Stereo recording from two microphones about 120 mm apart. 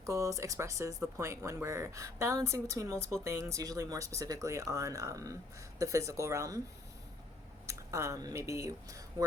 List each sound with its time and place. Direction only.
0.0 s speech: 25° right (ahead or behind)
7.7 s speech: 25° right (ahead or behind)